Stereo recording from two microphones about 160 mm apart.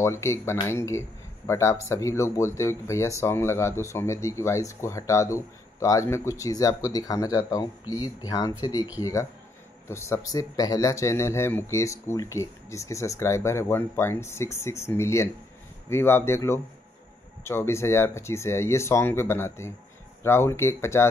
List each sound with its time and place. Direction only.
0.0 s speech: 15° left (ahead or behind)